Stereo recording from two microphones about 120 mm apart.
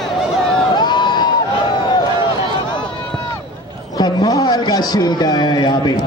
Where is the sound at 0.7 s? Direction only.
40° left (ahead or behind).